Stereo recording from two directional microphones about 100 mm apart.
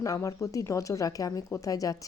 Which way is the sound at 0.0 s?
35° left (ahead or behind).